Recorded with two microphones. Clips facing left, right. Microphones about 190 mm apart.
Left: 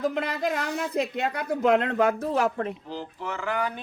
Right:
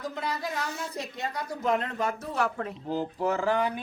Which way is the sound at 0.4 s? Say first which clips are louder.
Left 6 dB; 65° left (ahead or behind).